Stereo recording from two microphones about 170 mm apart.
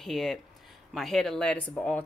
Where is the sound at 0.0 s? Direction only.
Centre (ahead or behind).